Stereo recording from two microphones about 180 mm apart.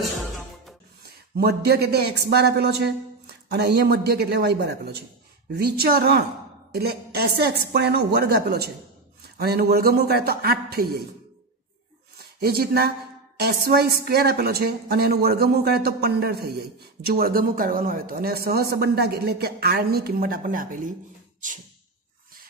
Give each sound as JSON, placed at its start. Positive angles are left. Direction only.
{"t": 0.0, "sound": "music", "side_deg": 0}
{"t": 1.0, "sound": "speech", "side_deg": -60}
{"t": 12.4, "sound": "speech", "side_deg": -60}